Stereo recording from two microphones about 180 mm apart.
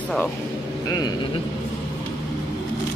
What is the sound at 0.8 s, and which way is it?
Speech, 20° left (ahead or behind).